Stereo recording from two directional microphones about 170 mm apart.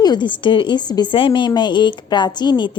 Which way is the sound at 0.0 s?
25° left (ahead or behind).